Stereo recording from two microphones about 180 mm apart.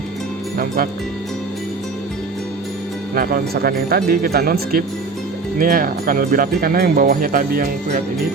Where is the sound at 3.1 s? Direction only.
55° right (ahead or behind).